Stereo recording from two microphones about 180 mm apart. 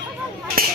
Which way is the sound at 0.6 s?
55° right (ahead or behind).